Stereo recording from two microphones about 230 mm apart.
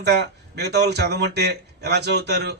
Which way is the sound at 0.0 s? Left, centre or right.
Right.